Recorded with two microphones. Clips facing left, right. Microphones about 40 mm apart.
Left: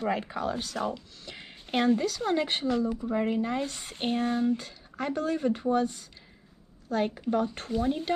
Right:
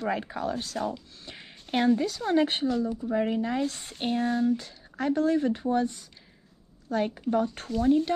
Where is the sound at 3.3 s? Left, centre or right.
Left.